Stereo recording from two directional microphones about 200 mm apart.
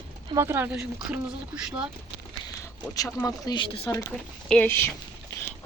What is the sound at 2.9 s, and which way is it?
Speech, 15° left (ahead or behind).